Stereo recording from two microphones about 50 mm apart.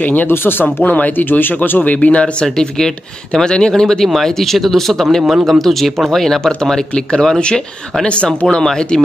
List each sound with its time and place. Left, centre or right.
0.1 s speech: left
1.8 s speech: left
3.3 s speech: centre